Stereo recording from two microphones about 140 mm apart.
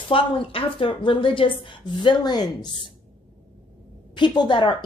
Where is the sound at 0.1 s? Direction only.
40° left (ahead or behind).